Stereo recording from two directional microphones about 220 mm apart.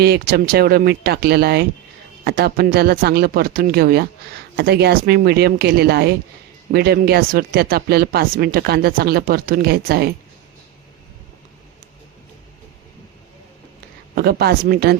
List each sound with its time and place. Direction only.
0.0 s speech: 45° right (ahead or behind)
14.2 s speech: 45° right (ahead or behind)